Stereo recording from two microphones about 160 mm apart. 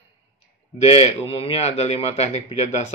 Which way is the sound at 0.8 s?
45° left (ahead or behind).